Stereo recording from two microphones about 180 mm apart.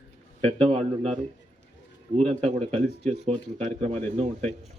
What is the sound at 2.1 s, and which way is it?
Speech, 35° right (ahead or behind).